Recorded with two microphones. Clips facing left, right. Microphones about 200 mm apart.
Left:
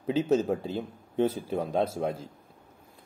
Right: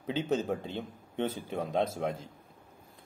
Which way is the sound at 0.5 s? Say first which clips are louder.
Left 4 dB; 5° left (ahead or behind).